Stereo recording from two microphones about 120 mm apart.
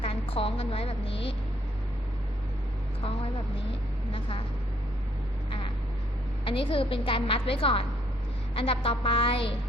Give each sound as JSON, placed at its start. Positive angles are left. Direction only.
{"t": 0.0, "sound": "a woman's voice", "side_deg": 50}
{"t": 4.1, "sound": "a woman's voice", "side_deg": 50}
{"t": 5.5, "sound": "vehicle", "side_deg": 45}
{"t": 6.4, "sound": "a woman's voice", "side_deg": 50}